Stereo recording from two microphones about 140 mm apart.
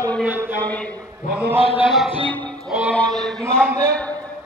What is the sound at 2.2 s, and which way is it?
Music, 10° left (ahead or behind).